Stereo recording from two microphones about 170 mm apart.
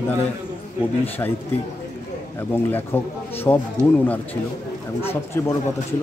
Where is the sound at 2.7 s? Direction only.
10° left (ahead or behind).